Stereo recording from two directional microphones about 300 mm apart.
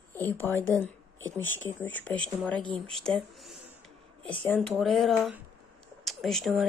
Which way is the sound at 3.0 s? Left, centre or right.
Centre.